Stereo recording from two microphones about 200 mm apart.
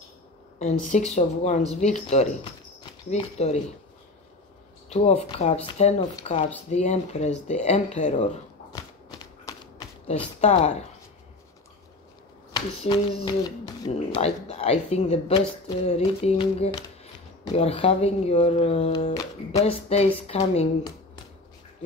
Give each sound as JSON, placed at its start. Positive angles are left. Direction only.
{"t": 0.9, "sound": "a woman's voice", "side_deg": 35}
{"t": 4.8, "sound": "a woman's voice", "side_deg": 30}
{"t": 9.5, "sound": "a sound", "side_deg": 15}
{"t": 10.0, "sound": "a woman's voice", "side_deg": 35}
{"t": 12.8, "sound": "a woman's voice", "side_deg": 25}